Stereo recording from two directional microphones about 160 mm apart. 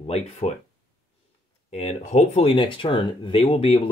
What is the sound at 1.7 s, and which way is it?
Speech, 45° left (ahead or behind).